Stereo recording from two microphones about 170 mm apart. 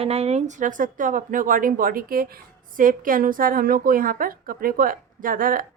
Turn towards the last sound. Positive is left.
turn(degrees=-55)  # may be behind; listen again after turning